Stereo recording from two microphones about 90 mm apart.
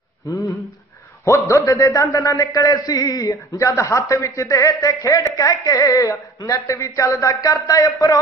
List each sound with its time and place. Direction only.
0.3 s a man's voice: 40° left (ahead or behind)
1.5 s a man's voice: 40° left (ahead or behind)